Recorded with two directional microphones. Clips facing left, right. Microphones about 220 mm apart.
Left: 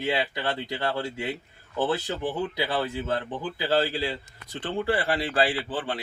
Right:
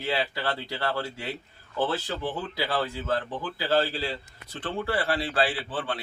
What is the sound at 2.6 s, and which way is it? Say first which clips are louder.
A man's voice: left 1 dB; 20° left (ahead or behind).